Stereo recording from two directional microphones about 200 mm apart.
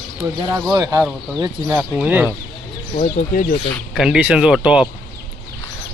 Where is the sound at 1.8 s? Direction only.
5° right (ahead or behind).